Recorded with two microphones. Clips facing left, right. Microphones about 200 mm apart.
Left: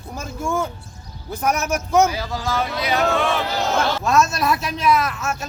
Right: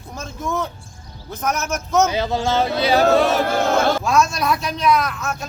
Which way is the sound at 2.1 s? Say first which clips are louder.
Right 5 dB; 20° right (ahead or behind).